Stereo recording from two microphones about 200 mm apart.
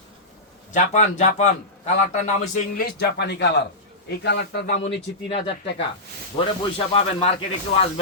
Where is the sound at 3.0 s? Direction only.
55° left (ahead or behind).